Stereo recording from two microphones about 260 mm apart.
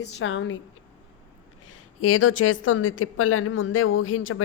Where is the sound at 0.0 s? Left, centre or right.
Left.